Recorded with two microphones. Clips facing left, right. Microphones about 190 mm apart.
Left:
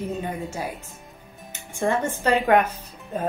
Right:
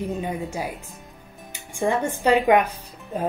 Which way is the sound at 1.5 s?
10° right (ahead or behind).